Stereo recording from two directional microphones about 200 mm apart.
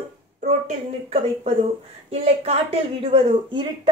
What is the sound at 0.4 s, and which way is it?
A woman's voice, 35° right (ahead or behind).